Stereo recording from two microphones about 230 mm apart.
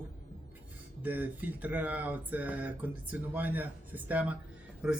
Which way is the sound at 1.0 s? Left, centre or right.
Centre.